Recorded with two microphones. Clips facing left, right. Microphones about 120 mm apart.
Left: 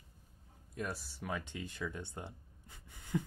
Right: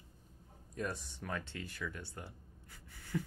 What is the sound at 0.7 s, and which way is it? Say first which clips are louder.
Speech: right 1 dB; centre (ahead or behind).